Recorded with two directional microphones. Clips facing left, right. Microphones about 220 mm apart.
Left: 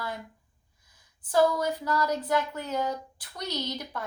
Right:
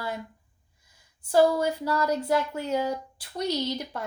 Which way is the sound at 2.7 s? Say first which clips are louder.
Right 3 dB; 10° right (ahead or behind).